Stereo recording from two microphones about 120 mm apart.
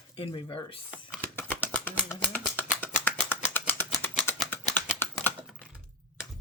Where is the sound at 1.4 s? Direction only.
15° left (ahead or behind).